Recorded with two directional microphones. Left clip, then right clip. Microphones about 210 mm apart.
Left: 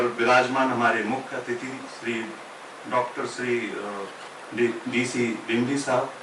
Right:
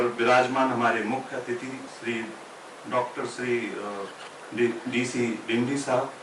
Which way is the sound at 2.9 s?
10° right (ahead or behind).